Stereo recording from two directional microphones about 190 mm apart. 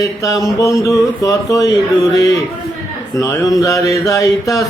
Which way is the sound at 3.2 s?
15° left (ahead or behind).